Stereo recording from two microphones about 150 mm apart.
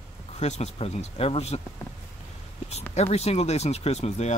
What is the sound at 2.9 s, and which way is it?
Speech, 45° left (ahead or behind).